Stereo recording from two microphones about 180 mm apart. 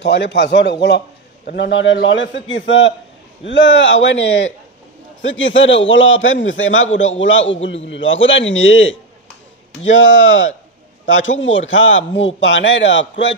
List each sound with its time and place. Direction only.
0.0 s a man's voice: 75° left (ahead or behind); by 13.0 s 90° left